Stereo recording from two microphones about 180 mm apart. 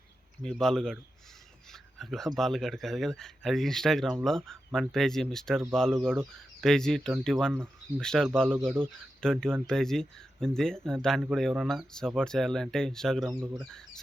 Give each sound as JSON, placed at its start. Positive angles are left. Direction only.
{"t": 0.4, "sound": "speech", "side_deg": 5}
{"t": 13.3, "sound": "speech", "side_deg": -15}